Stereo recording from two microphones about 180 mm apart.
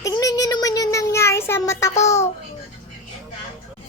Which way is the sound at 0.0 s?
20° left (ahead or behind).